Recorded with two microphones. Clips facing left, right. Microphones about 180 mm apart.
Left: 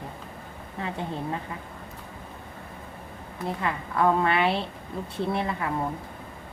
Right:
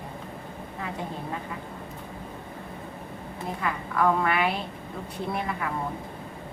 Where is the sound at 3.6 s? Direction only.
25° left (ahead or behind).